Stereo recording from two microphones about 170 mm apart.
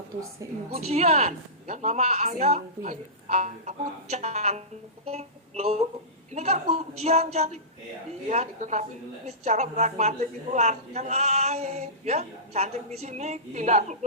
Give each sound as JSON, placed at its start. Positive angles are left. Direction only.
{"t": 0.9, "sound": "a woman's voice", "side_deg": -40}